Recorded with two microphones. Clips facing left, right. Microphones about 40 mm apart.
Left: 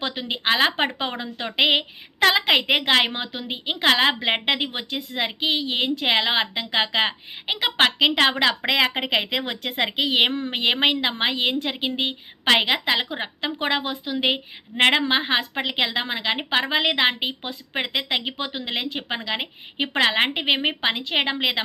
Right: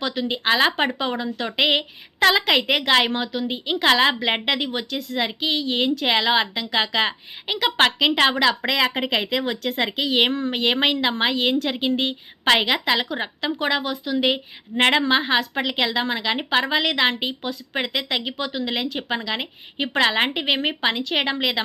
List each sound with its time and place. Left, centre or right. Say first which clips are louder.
0.0 s a woman's voice: right 2 dB; left
0.9 s a woman's voice: right 3 dB; left
3.8 s a woman's voice: right 1 dB; centre
4.6 s a woman's voice: right 2 dB; left; by 8.4 s centre
8.4 s a woman's voice: right 1 dB; left
10.2 s a woman's voice: right 1 dB; centre